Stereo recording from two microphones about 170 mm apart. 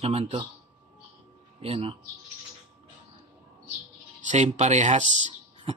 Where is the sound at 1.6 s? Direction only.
35° right (ahead or behind).